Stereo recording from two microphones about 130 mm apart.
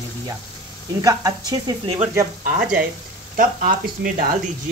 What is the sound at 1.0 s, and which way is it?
Speech, 25° right (ahead or behind).